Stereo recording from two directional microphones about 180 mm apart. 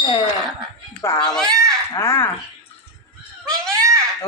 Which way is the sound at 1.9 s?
15° left (ahead or behind).